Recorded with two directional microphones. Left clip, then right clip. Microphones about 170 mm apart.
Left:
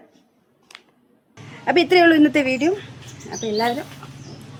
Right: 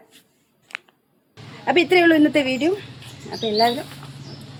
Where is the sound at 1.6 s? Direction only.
15° left (ahead or behind).